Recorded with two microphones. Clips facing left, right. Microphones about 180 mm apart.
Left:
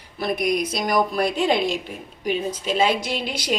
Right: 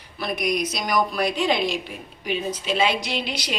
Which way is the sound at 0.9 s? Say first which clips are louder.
Left 1 dB; 25° left (ahead or behind).